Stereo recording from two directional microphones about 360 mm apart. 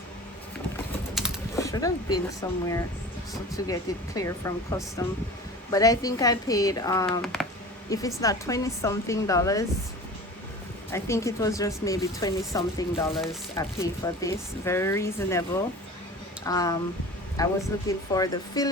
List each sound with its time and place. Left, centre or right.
1.1 s pigeon: centre
1.6 s speech: centre
10.9 s speech: centre
16.5 s speech: centre